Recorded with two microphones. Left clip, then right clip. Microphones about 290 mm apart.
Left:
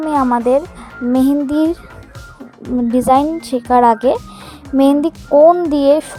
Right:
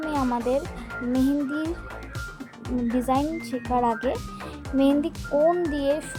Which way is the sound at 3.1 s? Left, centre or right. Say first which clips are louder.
Left 14 dB; left.